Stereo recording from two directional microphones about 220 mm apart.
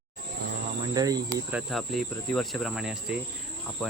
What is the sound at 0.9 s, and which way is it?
Speech, 15° right (ahead or behind).